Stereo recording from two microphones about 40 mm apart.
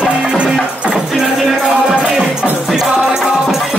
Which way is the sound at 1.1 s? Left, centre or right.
Centre.